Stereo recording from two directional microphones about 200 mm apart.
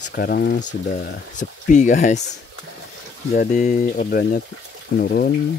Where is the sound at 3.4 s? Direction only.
40° left (ahead or behind).